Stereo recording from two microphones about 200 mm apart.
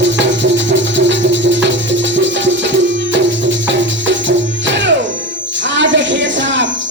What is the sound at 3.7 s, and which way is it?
Music, 65° right (ahead or behind).